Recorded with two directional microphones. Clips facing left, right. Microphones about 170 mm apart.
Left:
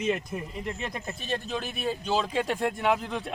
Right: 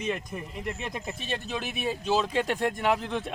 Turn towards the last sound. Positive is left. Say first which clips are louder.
# even
turn(degrees=0)  # may be behind; listen again after turning